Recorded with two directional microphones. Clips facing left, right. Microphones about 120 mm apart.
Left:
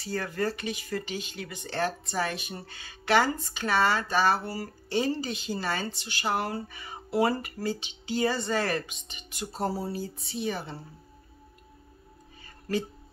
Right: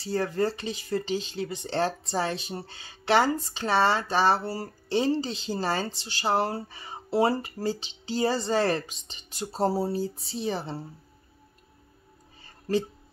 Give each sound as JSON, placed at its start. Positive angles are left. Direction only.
{"t": 0.0, "sound": "speech", "side_deg": -25}